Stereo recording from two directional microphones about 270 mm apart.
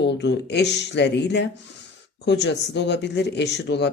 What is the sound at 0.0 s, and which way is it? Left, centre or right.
Speech, left.